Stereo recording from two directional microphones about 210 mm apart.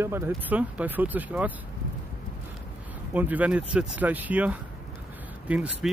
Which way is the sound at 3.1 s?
5° right (ahead or behind).